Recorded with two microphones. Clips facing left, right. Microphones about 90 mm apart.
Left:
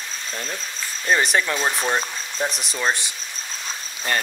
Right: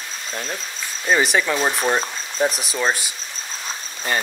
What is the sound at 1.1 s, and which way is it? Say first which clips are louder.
Speech: right 2 dB; centre (ahead or behind).